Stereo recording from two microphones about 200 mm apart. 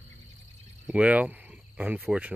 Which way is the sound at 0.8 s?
5° right (ahead or behind).